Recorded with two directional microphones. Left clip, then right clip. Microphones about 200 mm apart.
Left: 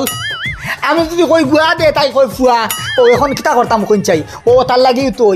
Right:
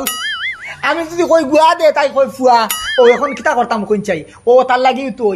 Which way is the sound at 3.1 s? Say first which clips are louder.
Left 3 dB; 40° left (ahead or behind).